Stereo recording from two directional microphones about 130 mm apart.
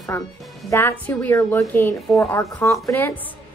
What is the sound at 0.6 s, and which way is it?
A woman's voice, 20° left (ahead or behind).